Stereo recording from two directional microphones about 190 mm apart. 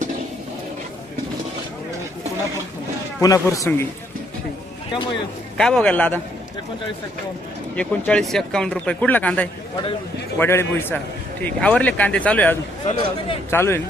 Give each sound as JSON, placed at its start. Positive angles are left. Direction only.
{"t": 3.2, "sound": "speech", "side_deg": 15}
{"t": 5.5, "sound": "a man's voice", "side_deg": 5}
{"t": 7.8, "sound": "speech", "side_deg": 5}
{"t": 13.0, "sound": "a man's voice", "side_deg": 30}
{"t": 13.5, "sound": "speech", "side_deg": 10}